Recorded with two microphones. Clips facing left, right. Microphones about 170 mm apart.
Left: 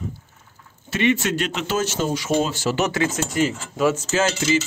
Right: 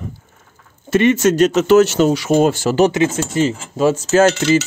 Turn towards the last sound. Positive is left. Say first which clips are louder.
# right 8 dB
turn(degrees=-65)  # may be behind; listen again after turning